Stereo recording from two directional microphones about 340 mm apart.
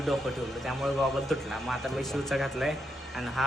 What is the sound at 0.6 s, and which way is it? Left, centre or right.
A man's voice, centre.